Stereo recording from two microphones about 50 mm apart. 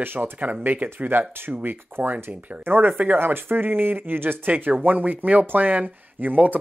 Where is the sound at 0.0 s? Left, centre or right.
Right.